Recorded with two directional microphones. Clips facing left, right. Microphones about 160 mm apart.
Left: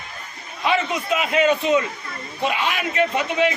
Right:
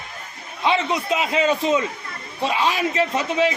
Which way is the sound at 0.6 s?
25° right (ahead or behind).